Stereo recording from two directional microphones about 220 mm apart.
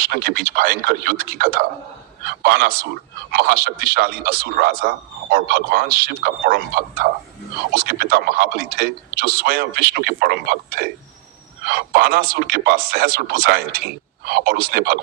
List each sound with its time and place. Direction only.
0.0 s a man's voice: 45° right (ahead or behind)